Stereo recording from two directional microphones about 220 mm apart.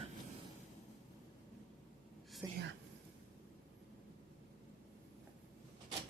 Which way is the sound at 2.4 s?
15° right (ahead or behind).